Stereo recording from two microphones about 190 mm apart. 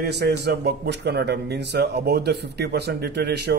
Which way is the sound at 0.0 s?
60° right (ahead or behind).